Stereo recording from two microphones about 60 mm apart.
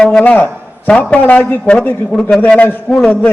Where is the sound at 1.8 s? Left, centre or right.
Left.